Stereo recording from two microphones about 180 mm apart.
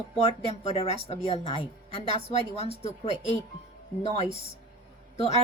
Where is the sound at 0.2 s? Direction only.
35° left (ahead or behind).